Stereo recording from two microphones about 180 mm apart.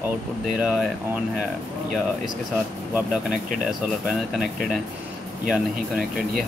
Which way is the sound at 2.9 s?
5° right (ahead or behind).